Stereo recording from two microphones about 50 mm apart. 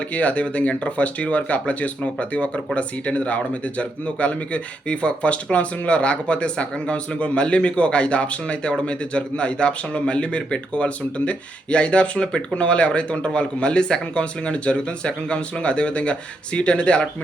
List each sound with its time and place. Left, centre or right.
0.1 s speech: left